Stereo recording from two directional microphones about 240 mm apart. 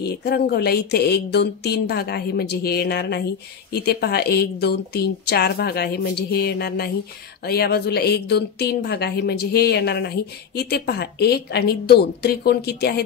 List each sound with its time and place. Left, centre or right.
0.0 s a woman's voice: left